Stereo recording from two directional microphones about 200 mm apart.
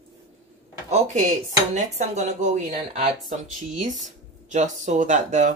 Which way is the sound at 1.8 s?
35° right (ahead or behind).